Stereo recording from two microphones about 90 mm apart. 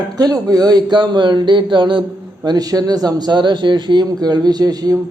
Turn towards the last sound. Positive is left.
turn(degrees=-45)  # may be behind; listen again after turning